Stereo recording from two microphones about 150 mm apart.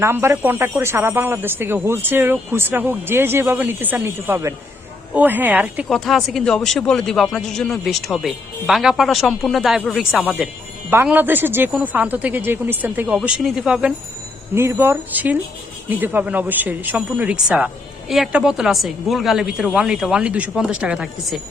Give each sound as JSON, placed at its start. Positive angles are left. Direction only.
{"t": 0.0, "sound": "speech", "side_deg": -15}
{"t": 5.9, "sound": "a man's voice", "side_deg": 0}
{"t": 14.5, "sound": "a man's voice", "side_deg": -15}